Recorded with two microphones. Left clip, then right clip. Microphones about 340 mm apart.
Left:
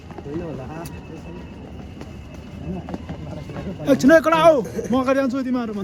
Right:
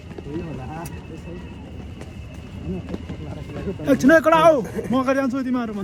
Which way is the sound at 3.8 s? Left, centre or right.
Centre.